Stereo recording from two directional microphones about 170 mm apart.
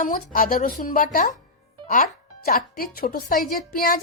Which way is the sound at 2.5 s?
60° left (ahead or behind).